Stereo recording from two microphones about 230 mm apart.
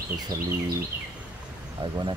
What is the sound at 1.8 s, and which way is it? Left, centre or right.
Speech, right.